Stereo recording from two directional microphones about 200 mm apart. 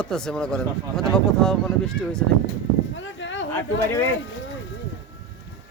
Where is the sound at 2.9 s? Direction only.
70° left (ahead or behind).